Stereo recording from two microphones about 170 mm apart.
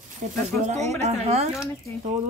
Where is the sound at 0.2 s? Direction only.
45° right (ahead or behind).